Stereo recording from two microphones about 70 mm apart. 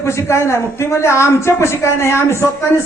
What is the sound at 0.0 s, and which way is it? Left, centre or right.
Speech, left.